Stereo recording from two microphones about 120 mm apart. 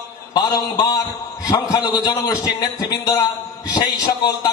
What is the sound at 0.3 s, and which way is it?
A man's voice, 35° left (ahead or behind).